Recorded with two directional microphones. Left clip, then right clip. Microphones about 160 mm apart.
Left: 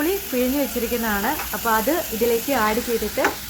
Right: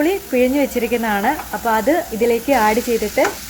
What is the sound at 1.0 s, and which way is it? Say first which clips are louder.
Speech: right 5 dB; 25° right (ahead or behind).